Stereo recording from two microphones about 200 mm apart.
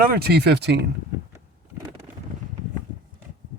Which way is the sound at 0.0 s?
50° right (ahead or behind).